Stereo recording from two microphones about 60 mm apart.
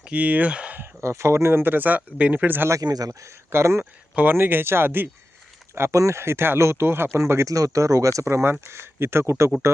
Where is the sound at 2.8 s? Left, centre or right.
Right.